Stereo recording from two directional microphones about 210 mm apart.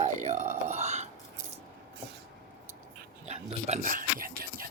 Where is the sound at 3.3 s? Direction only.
30° right (ahead or behind).